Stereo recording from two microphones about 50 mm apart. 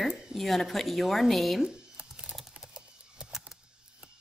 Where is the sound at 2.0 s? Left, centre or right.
Right.